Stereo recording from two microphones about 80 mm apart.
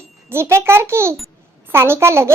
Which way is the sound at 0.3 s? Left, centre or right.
Right.